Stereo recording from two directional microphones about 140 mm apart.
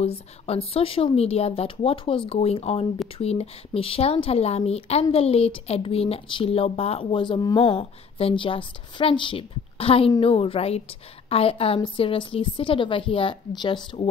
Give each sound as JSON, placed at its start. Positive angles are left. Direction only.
{"t": 0.0, "sound": "a woman's voice", "side_deg": 45}